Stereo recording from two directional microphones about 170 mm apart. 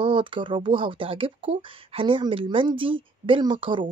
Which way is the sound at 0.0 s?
30° right (ahead or behind).